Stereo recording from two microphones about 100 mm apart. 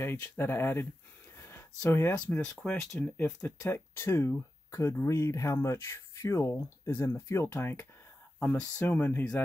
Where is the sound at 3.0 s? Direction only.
20° left (ahead or behind).